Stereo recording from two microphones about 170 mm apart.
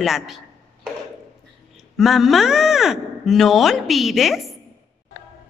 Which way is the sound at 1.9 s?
Centre (ahead or behind).